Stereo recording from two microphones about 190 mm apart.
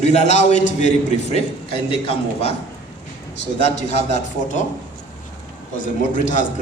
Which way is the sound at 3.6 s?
35° left (ahead or behind).